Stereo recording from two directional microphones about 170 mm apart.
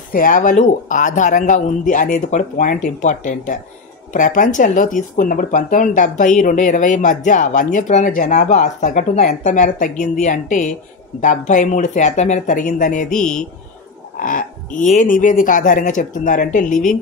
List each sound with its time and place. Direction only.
0.1 s speech: 55° left (ahead or behind)
13.1 s speech: 5° left (ahead or behind)
14.2 s speech: 50° left (ahead or behind)